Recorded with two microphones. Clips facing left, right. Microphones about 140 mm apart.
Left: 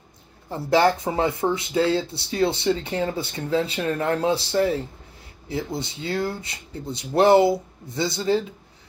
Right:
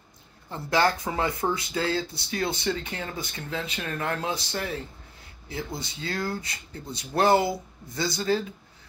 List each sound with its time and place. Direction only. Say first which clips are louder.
0.5 s speech: left 5 dB; 25° left (ahead or behind)